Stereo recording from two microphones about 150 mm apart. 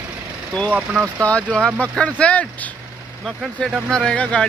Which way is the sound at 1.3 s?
5° left (ahead or behind).